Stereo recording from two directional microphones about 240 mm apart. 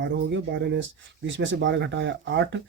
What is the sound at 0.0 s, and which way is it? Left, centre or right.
Speech, right.